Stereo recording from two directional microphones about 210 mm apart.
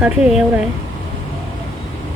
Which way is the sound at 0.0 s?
5° right (ahead or behind).